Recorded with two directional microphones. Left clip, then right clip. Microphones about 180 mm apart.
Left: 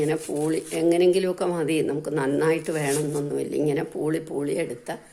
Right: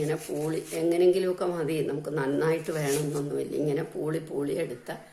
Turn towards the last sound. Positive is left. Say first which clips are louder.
# left 4 dB
turn(degrees=40)  # may be behind; listen again after turning